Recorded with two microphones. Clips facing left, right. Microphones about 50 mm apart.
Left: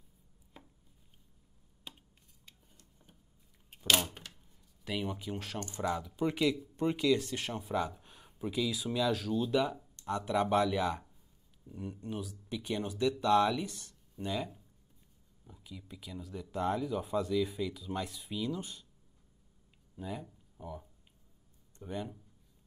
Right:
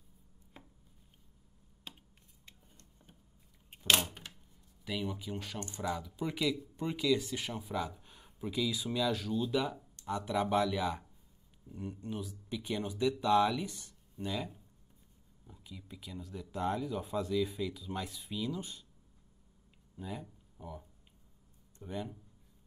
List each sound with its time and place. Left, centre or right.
3.7 s a sound: right
5.3 s speech: centre
5.9 s speech: centre
13.7 s a sound: centre
14.2 s speech: centre
20.0 s speech: centre